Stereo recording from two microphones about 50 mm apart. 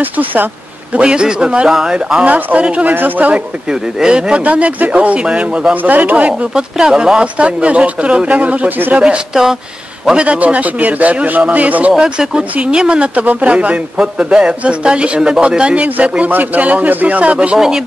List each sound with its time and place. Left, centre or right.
0.0 s speech: right
0.9 s a man's voice: centre
1.7 s speech: centre
2.0 s a man's voice: centre
2.2 s a man's voice: right
4.0 s a man's voice: centre
5.8 s speech: right
6.5 s a man's voice: centre; by 8.9 s right
8.9 s speech: centre
10.1 s a man's voice: right
12.0 s a man's voice: centre
17.6 s speech: centre